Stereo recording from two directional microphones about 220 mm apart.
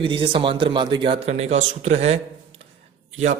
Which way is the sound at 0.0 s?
25° right (ahead or behind).